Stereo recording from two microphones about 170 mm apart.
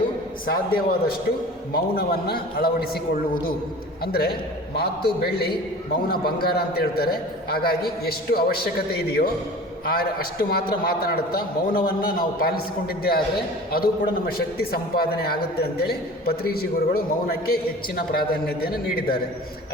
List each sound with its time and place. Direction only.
0.4 s a man's voice: 60° left (ahead or behind)
4.0 s a man's voice: 65° left (ahead or behind)